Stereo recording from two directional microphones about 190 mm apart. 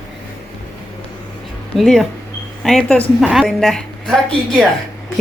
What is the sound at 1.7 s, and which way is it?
A woman's voice, centre (ahead or behind).